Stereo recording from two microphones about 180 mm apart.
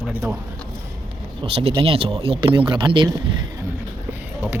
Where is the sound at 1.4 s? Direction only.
30° right (ahead or behind).